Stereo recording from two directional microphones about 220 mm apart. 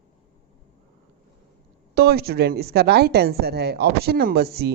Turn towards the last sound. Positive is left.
turn(degrees=-45)  # may be behind; listen again after turning